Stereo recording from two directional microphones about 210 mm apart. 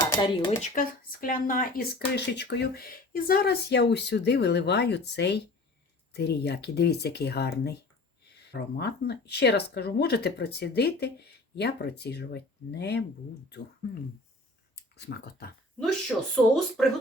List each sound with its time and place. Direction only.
0.0 s speech: 20° left (ahead or behind)
0.6 s speech: 40° left (ahead or behind)
14.9 s speech: 50° left (ahead or behind)
15.8 s speech: centre (ahead or behind)